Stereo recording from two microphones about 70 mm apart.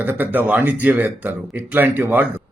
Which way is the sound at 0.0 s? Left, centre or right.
Right.